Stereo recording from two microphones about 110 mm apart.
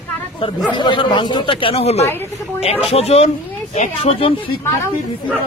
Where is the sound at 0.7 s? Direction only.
45° left (ahead or behind).